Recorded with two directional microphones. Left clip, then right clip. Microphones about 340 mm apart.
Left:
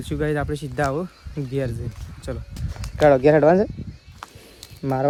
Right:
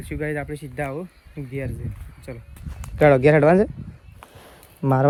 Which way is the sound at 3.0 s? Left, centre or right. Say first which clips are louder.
Even; right.